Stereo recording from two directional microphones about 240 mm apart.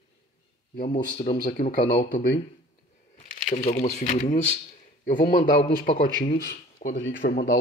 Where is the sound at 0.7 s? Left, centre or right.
Left.